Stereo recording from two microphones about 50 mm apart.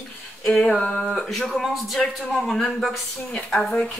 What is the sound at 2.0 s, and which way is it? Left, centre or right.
A woman's voice, centre.